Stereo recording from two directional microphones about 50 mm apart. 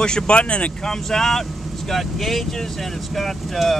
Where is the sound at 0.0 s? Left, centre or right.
Centre.